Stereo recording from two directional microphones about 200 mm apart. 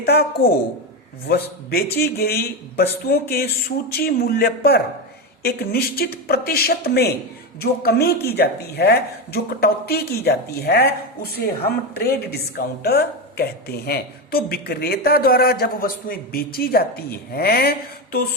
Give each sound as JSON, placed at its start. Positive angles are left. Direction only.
{"t": 0.0, "sound": "speech", "side_deg": 55}